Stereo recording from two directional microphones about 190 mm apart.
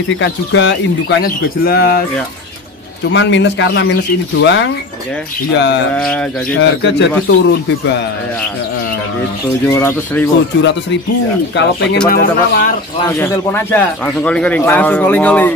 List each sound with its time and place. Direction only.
0.1 s speech: 75° left (ahead or behind)
1.2 s speech: 55° left (ahead or behind)
3.1 s speech: 75° left (ahead or behind)
5.9 s speech: 5° left (ahead or behind)
6.6 s speech: 70° left (ahead or behind)
9.7 s speech: 15° left (ahead or behind)
10.6 s speech: 70° left (ahead or behind)
12.1 s speech: 50° left (ahead or behind)
13.0 s speech: 15° left (ahead or behind)